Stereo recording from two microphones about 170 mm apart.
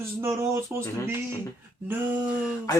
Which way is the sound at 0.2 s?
15° right (ahead or behind).